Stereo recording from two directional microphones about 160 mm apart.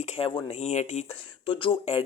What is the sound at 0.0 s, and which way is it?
Speech, 40° left (ahead or behind).